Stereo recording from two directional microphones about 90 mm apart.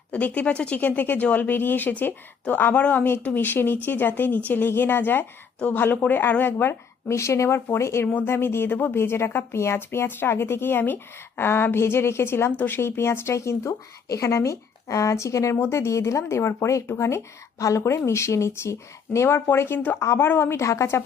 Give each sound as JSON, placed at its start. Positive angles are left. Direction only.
{"t": 0.1, "sound": "speech", "side_deg": 15}